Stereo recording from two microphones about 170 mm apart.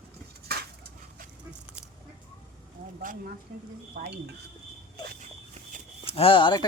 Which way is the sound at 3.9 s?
60° right (ahead or behind).